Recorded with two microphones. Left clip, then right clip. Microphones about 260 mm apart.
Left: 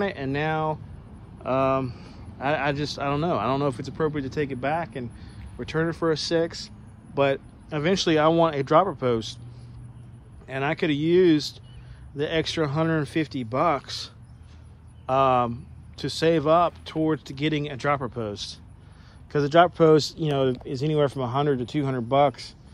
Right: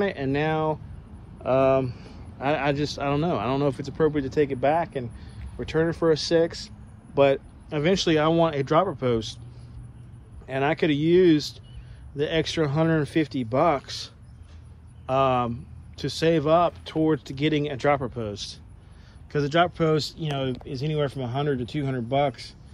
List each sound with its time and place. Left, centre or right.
0.0 s speech: centre
10.4 s speech: centre